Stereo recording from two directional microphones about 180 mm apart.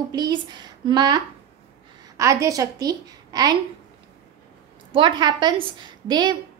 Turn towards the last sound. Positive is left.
turn(degrees=-25)  # may be behind; listen again after turning